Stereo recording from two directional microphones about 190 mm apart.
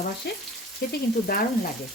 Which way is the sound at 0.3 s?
55° left (ahead or behind).